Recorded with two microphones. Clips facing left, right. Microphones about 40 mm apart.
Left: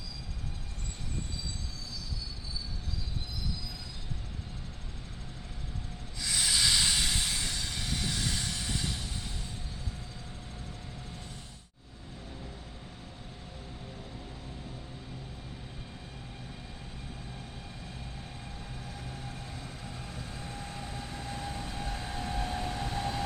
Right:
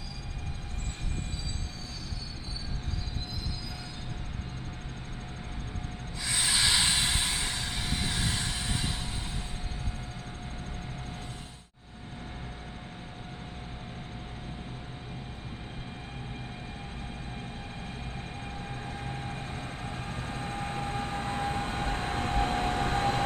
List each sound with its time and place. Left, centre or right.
6.2 s vehicle: right
18.9 s vehicle: right